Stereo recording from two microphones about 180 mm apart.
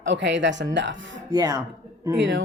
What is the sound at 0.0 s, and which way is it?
Speech, 80° right.